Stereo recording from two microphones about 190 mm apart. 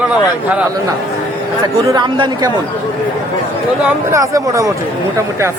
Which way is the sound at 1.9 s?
20° right (ahead or behind).